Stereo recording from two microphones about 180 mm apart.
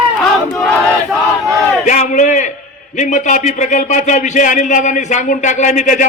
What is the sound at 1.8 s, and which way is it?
Speech, 45° left (ahead or behind).